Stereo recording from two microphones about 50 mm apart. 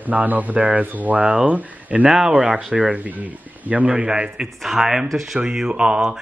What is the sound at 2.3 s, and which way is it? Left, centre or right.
A man's voice, right.